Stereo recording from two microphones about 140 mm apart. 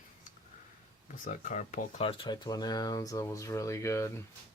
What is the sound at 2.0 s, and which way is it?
Speech, 40° left (ahead or behind).